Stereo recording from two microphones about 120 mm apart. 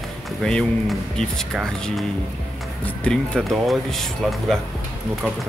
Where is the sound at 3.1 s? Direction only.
Centre (ahead or behind).